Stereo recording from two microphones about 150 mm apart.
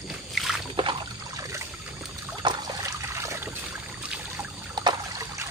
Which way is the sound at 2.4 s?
30° right (ahead or behind).